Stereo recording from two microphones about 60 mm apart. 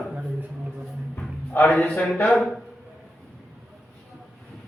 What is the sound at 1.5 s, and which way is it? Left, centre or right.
Speech, left.